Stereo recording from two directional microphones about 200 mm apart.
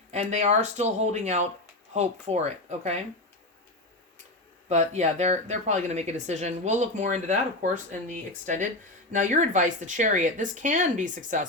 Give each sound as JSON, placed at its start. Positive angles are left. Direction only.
{"t": 0.1, "sound": "speech", "side_deg": -35}
{"t": 4.7, "sound": "speech", "side_deg": -35}